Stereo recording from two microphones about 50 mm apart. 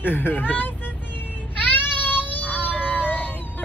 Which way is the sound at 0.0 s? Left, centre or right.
Left.